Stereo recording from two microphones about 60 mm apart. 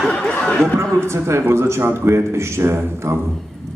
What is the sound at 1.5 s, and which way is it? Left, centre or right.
A man's voice, right.